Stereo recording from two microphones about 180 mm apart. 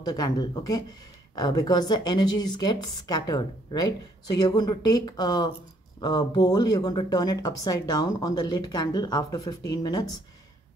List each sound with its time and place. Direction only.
0.0 s a woman's voice: 20° left (ahead or behind)